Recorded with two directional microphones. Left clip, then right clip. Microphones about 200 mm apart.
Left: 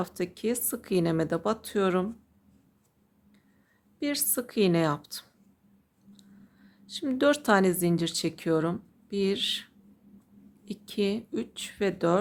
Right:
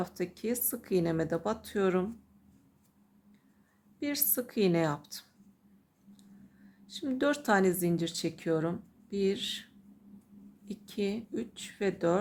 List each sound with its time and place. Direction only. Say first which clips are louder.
0.0 s speech: left 4 dB; 30° left (ahead or behind)
4.0 s speech: left 4 dB; 25° left (ahead or behind)
6.8 s speech: left 6 dB; 30° left (ahead or behind)
10.7 s speech: left 5 dB; 30° left (ahead or behind)